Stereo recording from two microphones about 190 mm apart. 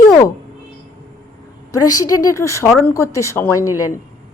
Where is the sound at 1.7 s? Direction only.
15° left (ahead or behind).